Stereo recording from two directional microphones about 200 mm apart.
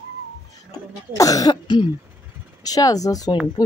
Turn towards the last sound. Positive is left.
turn(degrees=20)  # may be behind; listen again after turning